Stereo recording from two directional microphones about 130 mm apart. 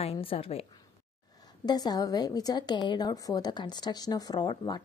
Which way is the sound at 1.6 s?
30° left (ahead or behind).